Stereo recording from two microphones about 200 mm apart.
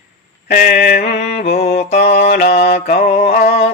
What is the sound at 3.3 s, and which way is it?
Music, 50° left (ahead or behind).